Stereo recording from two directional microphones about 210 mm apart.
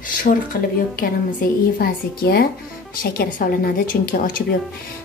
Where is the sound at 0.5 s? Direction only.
45° left (ahead or behind).